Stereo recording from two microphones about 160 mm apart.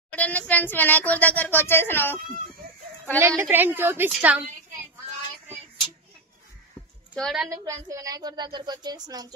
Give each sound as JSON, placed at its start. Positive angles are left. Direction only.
{"t": 0.1, "sound": "speech", "side_deg": 10}
{"t": 3.2, "sound": "a woman's voice", "side_deg": -15}
{"t": 7.2, "sound": "a woman's voice", "side_deg": 0}
{"t": 7.4, "sound": "a woman's voice", "side_deg": -20}